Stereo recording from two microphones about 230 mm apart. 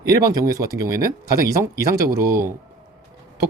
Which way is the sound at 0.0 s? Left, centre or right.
Centre.